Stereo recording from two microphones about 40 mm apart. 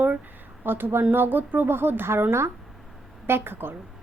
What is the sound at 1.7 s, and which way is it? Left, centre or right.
Speech, right.